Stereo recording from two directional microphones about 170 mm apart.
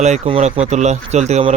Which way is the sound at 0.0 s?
40° right (ahead or behind).